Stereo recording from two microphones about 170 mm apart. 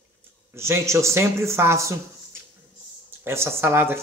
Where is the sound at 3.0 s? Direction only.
15° right (ahead or behind).